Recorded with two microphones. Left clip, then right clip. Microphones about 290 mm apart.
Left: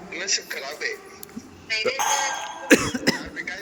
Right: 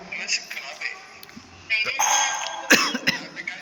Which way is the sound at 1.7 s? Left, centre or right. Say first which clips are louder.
Right 1 dB; left.